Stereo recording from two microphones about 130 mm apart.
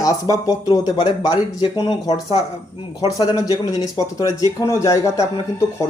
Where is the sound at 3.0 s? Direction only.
30° left (ahead or behind).